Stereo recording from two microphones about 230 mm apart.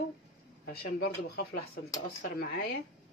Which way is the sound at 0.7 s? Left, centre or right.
Left.